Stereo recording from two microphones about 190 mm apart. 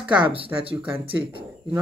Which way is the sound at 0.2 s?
30° right (ahead or behind).